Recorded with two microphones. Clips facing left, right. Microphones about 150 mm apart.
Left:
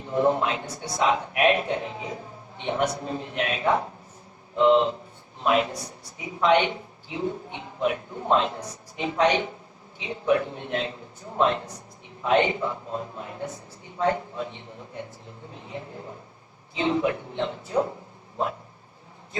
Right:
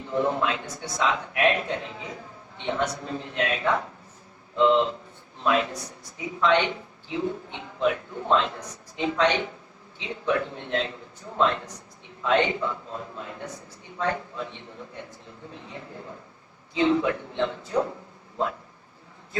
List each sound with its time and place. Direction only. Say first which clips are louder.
0.1 s a woman's voice: left 2 dB; 25° left (ahead or behind)
16.7 s speech: right 2 dB; 25° left (ahead or behind)